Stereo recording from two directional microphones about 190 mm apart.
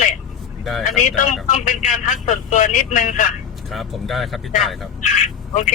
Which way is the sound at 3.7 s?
Centre (ahead or behind).